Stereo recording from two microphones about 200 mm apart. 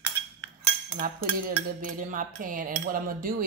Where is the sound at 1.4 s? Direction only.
40° right (ahead or behind).